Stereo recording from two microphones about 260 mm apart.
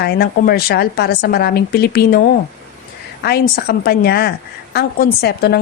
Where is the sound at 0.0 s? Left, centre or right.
Left.